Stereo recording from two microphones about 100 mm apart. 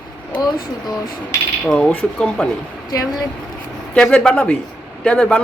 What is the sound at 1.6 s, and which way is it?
Speech, 10° left (ahead or behind).